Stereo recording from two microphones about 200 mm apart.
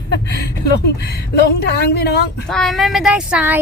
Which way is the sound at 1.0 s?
55° left (ahead or behind).